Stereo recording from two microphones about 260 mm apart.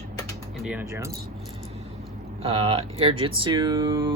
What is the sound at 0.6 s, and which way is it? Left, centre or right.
Speech, centre.